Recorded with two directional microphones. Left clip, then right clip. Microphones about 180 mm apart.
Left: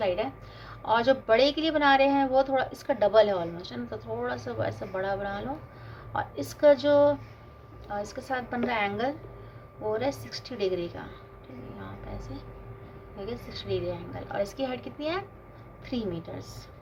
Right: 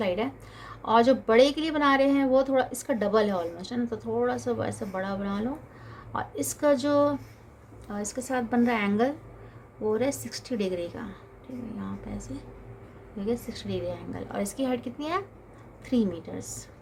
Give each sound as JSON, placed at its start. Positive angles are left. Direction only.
{"t": 0.0, "sound": "a woman's voice", "side_deg": -55}
{"t": 13.2, "sound": "a woman's voice", "side_deg": -50}